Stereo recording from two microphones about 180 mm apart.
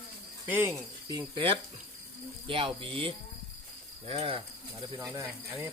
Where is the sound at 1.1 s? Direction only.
25° right (ahead or behind).